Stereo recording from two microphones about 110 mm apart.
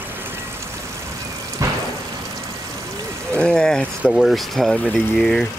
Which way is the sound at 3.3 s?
5° left (ahead or behind).